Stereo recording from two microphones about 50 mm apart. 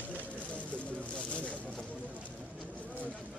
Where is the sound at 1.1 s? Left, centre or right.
Left.